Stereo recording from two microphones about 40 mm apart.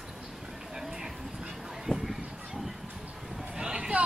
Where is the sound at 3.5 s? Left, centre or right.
Right.